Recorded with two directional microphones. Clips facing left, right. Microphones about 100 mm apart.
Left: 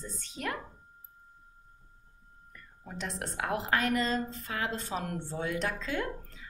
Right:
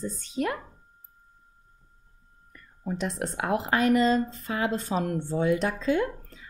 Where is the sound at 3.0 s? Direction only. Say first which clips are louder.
Right 4 dB; 20° right (ahead or behind).